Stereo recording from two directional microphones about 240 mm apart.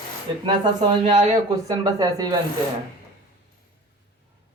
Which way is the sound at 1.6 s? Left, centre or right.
Centre.